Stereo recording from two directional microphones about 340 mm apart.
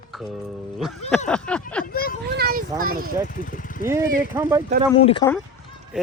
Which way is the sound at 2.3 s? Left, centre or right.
Right.